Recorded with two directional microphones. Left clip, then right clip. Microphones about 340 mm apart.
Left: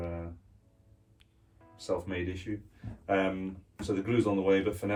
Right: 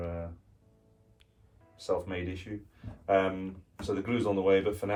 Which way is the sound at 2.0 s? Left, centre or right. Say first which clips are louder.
Left 1 dB; centre.